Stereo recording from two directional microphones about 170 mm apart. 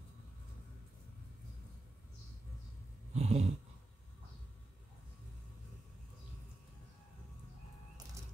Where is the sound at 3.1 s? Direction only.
40° right (ahead or behind).